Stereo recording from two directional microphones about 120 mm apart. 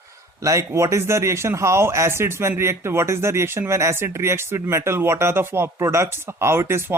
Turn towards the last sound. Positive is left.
turn(degrees=-20)  # may be behind; listen again after turning